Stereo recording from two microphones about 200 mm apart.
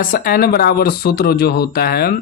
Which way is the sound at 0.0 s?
45° left (ahead or behind).